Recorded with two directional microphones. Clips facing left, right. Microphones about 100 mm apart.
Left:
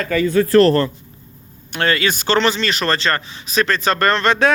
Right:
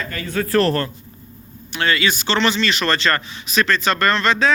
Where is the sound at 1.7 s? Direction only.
45° left (ahead or behind).